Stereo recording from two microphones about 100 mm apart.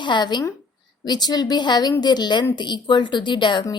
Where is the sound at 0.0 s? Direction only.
50° left (ahead or behind).